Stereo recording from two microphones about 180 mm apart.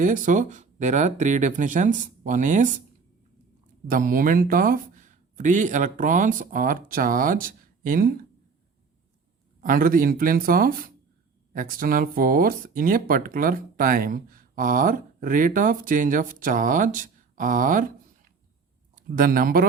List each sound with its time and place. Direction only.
0.0 s speech: 45° right (ahead or behind)
3.8 s speech: 50° right (ahead or behind)
9.6 s speech: 50° right (ahead or behind)
18.9 s speech: 50° right (ahead or behind)